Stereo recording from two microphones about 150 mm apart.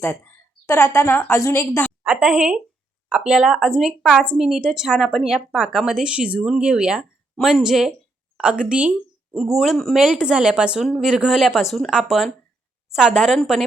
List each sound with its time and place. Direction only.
0.0 s a woman's voice: 15° left (ahead or behind)
2.0 s a woman's voice: 10° right (ahead or behind)